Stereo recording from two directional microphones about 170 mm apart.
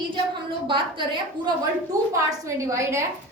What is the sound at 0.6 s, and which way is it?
Speech, 30° right (ahead or behind).